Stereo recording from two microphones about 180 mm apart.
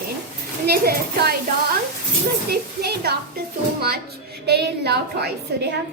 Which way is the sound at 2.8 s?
60° right (ahead or behind).